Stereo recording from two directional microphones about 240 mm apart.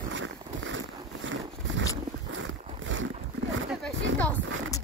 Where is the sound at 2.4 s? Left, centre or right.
Right.